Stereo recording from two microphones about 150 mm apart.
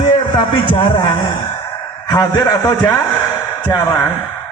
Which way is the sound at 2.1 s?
25° left (ahead or behind).